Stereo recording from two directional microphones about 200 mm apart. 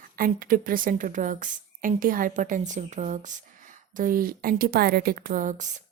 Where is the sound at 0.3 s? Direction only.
45° right (ahead or behind).